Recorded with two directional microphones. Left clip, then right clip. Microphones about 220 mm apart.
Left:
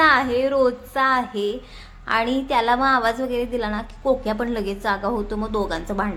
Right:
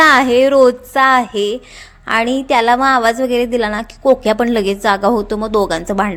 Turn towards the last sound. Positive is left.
turn(degrees=-35)  # may be behind; listen again after turning